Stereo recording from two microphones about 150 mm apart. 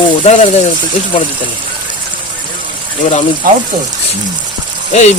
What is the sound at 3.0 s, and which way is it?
Speech, 55° left (ahead or behind).